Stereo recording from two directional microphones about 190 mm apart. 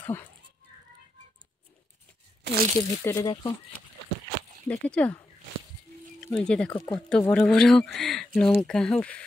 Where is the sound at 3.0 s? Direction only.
10° left (ahead or behind).